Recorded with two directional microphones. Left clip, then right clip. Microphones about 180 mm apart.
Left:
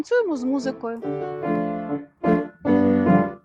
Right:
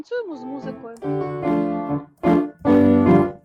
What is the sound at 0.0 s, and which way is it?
Speech, 45° left (ahead or behind).